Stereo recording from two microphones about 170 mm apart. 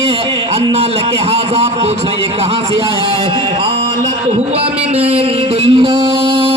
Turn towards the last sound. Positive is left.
turn(degrees=-30)  # may be behind; listen again after turning